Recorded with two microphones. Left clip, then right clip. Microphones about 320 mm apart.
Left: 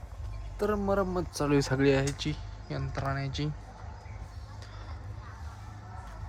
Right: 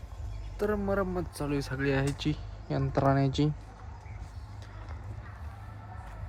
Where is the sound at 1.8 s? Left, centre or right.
Centre.